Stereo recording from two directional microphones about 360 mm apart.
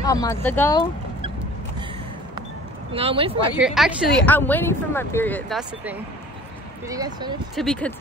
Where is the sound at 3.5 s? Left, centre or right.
Centre.